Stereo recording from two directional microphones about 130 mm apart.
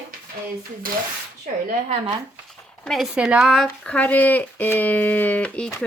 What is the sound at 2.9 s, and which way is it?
Speech, 5° right (ahead or behind).